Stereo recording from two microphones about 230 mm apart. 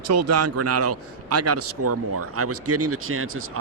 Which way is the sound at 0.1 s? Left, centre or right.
Right.